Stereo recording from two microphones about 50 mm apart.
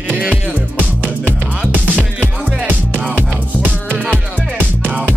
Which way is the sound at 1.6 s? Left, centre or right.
Right.